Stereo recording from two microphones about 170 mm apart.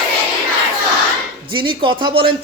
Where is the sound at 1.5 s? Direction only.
30° right (ahead or behind).